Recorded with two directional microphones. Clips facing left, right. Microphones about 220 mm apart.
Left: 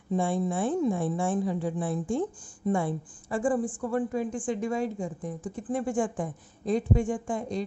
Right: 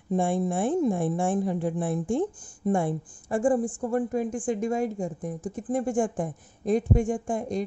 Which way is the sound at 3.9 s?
45° right (ahead or behind).